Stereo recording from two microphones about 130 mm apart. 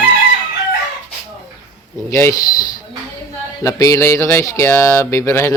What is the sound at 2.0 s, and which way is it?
Speech, 25° left (ahead or behind).